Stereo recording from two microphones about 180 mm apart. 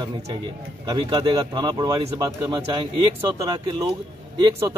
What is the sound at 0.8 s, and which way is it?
A man's voice, 25° right (ahead or behind).